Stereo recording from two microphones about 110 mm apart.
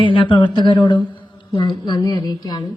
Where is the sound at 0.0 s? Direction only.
50° left (ahead or behind).